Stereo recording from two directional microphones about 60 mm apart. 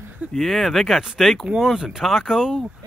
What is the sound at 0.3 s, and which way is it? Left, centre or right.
Speech, centre.